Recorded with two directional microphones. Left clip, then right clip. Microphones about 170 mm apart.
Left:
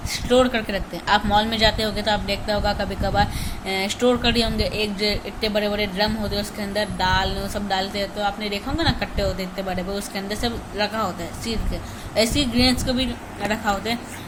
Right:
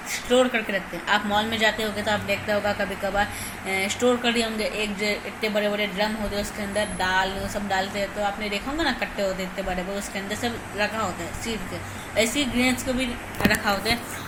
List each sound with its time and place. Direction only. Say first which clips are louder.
0.1 s a woman's voice: left 2 dB; 20° left (ahead or behind)